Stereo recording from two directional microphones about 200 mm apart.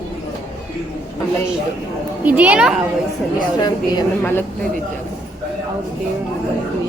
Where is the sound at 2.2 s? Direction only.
10° right (ahead or behind).